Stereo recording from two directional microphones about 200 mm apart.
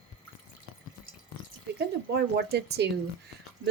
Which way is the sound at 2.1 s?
55° right (ahead or behind).